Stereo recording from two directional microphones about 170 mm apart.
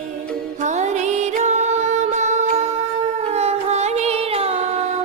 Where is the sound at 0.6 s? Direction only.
45° right (ahead or behind).